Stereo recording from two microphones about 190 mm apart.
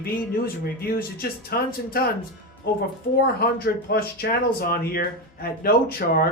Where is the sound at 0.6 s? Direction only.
50° left (ahead or behind).